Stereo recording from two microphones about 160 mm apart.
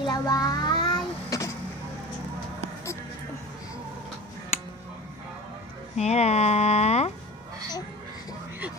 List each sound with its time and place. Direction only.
0.0 s child singing: 25° left (ahead or behind)
5.9 s speech: 45° left (ahead or behind)